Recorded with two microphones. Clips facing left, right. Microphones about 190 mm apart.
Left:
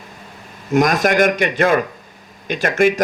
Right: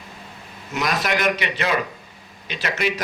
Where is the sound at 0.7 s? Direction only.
50° left (ahead or behind).